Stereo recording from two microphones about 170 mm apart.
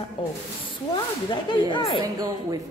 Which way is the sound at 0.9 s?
25° left (ahead or behind).